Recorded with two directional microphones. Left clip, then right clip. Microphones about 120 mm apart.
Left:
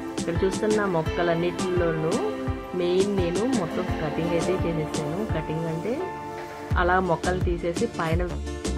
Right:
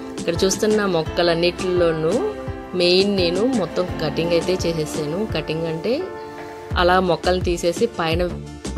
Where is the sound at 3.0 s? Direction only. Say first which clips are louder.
Right 6 dB; centre (ahead or behind).